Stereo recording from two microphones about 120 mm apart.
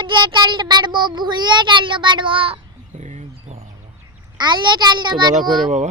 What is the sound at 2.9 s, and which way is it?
Bird, 85° right.